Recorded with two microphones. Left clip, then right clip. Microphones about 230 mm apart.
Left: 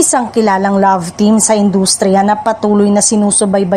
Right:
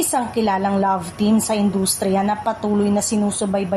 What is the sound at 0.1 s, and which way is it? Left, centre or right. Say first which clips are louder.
A woman's voice: left 8 dB; left.